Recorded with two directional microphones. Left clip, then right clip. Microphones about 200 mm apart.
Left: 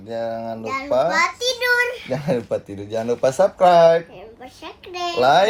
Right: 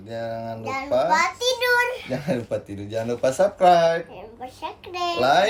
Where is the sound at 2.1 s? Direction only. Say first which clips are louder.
Left 4 dB; 10° left (ahead or behind).